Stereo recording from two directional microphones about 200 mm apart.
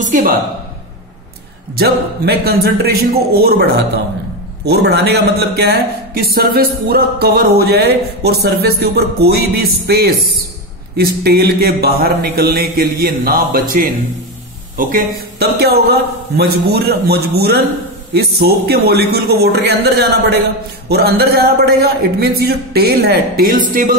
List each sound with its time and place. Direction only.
0.0 s speech: 40° right (ahead or behind)
1.8 s a man's voice: 50° right (ahead or behind)